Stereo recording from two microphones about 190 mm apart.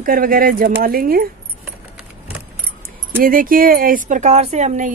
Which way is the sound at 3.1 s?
50° right (ahead or behind).